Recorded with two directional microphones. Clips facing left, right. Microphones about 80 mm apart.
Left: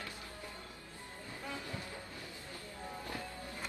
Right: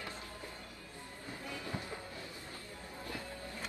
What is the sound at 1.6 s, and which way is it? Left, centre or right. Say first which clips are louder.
Train: right 2 dB; right.